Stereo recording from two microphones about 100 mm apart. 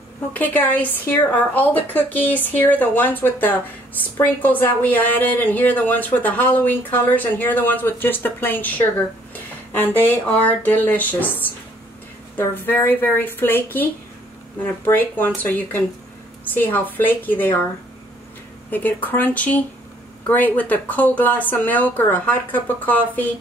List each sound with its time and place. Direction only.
0.3 s a woman's voice: 15° left (ahead or behind)
18.7 s a woman's voice: 20° left (ahead or behind)